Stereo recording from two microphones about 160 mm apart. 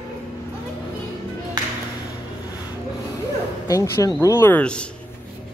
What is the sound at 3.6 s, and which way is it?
Speech, 20° left (ahead or behind).